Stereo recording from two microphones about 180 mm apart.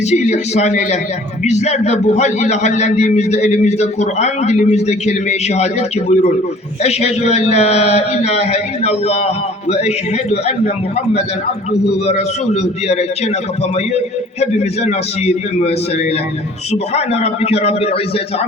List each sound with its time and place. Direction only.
0.1 s a man's voice: 40° left (ahead or behind)
6.8 s a man's voice: 35° left (ahead or behind)
11.7 s a man's voice: 35° left (ahead or behind)
14.4 s a man's voice: 35° left (ahead or behind)
16.7 s a man's voice: 35° left (ahead or behind)